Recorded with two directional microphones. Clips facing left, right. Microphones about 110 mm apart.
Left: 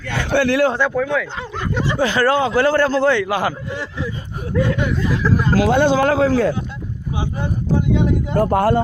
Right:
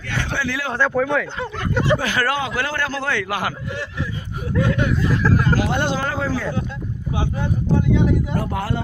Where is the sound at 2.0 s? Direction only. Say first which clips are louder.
Left 6 dB; 25° left (ahead or behind).